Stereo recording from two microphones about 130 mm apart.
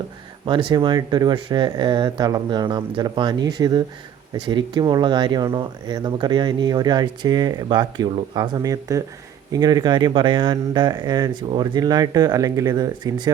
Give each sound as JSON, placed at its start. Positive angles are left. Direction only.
{"t": 0.4, "sound": "speech", "side_deg": -40}
{"t": 8.5, "sound": "speech", "side_deg": -25}